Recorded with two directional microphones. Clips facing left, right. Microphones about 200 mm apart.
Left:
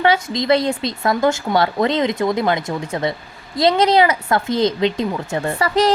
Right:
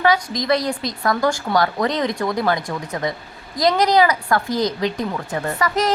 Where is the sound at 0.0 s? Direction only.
25° left (ahead or behind).